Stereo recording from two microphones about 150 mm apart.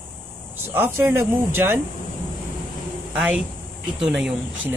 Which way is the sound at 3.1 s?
10° right (ahead or behind).